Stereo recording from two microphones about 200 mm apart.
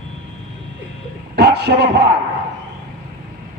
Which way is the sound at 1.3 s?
55° right (ahead or behind).